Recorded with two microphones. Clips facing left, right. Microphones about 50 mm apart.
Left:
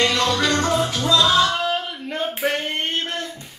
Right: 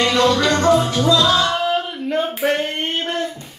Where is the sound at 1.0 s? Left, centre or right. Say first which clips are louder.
Right 1 dB; left.